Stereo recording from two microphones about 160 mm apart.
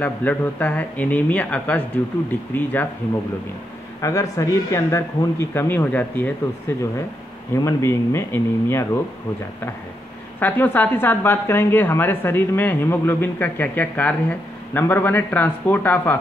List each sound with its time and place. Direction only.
0.0 s a woman's voice: 10° left (ahead or behind)
4.0 s a woman's voice: 20° left (ahead or behind)
10.4 s a woman's voice: 10° left (ahead or behind)